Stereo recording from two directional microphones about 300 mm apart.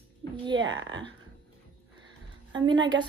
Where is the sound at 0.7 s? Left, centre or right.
Right.